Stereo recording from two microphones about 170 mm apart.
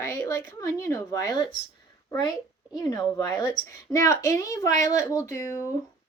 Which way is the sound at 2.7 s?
20° left (ahead or behind).